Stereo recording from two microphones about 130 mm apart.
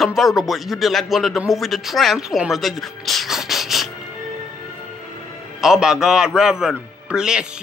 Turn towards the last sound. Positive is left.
turn(degrees=-5)  # may be behind; listen again after turning